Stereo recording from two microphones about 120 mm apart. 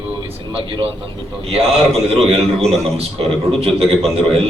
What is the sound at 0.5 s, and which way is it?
A man's voice, 50° right (ahead or behind).